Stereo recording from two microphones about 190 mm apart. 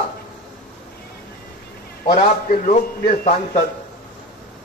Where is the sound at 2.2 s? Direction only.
45° left (ahead or behind).